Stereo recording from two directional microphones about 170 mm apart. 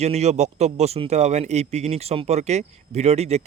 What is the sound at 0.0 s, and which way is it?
A man's voice, 40° right (ahead or behind).